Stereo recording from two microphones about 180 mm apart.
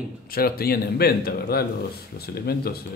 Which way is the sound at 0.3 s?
55° left (ahead or behind).